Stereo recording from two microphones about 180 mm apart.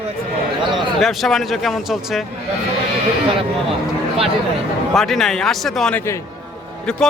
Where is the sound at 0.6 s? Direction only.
25° right (ahead or behind).